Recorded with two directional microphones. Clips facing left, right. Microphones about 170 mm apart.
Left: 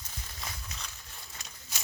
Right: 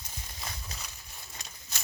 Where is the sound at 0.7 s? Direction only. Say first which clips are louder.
Even; 35° right (ahead or behind).